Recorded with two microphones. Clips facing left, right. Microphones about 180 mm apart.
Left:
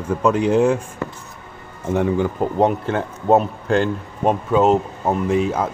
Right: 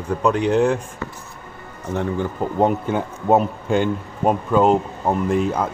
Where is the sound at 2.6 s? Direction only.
5° right (ahead or behind).